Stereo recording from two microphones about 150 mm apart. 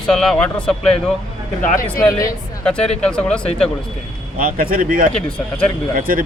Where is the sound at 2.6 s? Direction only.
5° left (ahead or behind).